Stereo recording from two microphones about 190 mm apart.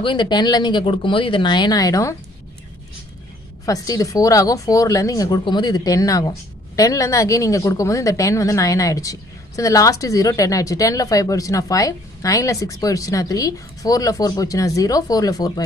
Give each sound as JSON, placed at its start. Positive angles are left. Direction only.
{"t": 0.0, "sound": "speech", "side_deg": 25}
{"t": 3.6, "sound": "a woman's voice", "side_deg": 20}